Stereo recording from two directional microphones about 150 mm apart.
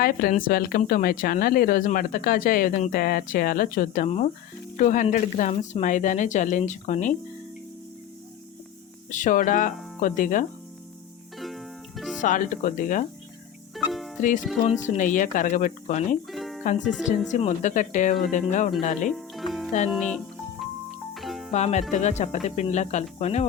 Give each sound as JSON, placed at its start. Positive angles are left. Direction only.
{"t": 0.0, "sound": "speech", "side_deg": 75}
{"t": 9.0, "sound": "speech", "side_deg": 55}
{"t": 11.3, "sound": "music", "side_deg": 0}
{"t": 12.2, "sound": "speech", "side_deg": 55}
{"t": 13.7, "sound": "music", "side_deg": 0}
{"t": 14.2, "sound": "speech", "side_deg": 55}
{"t": 14.4, "sound": "speech", "side_deg": 0}
{"t": 14.8, "sound": "speech", "side_deg": 60}
{"t": 16.3, "sound": "music", "side_deg": 0}
{"t": 16.8, "sound": "speech", "side_deg": 5}
{"t": 17.3, "sound": "speech", "side_deg": 50}
{"t": 19.1, "sound": "music", "side_deg": 0}
{"t": 21.5, "sound": "speech", "side_deg": 50}